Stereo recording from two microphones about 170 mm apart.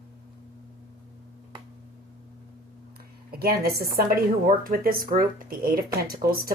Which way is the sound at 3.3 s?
65° right (ahead or behind).